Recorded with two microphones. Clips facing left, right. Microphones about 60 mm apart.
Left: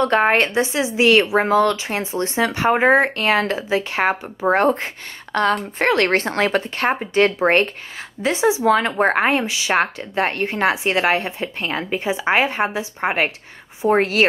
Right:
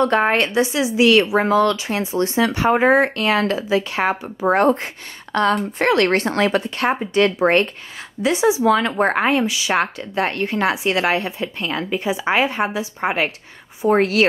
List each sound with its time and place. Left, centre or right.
0.1 s speech: left
0.6 s speech: left
5.3 s a woman's voice: left